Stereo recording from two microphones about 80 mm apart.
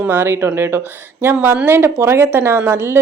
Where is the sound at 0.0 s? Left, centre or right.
Right.